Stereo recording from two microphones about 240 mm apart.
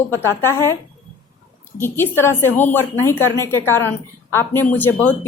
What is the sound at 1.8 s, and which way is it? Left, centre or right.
A woman's voice, centre.